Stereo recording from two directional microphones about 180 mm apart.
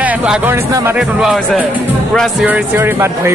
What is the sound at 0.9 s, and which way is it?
Speech, centre (ahead or behind).